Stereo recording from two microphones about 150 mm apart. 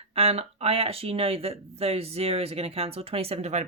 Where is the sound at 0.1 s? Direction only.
45° right (ahead or behind).